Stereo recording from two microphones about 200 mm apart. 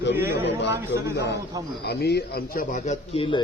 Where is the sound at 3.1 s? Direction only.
30° left (ahead or behind).